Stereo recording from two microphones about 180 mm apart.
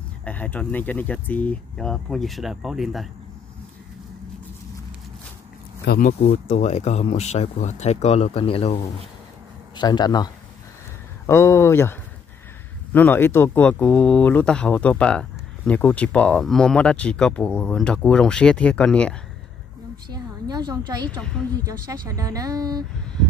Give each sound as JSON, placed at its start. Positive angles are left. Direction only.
{"t": 0.2, "sound": "speech", "side_deg": 10}
{"t": 5.9, "sound": "speech", "side_deg": 50}
{"t": 9.8, "sound": "speech", "side_deg": 25}
{"t": 20.1, "sound": "a woman's voice", "side_deg": -20}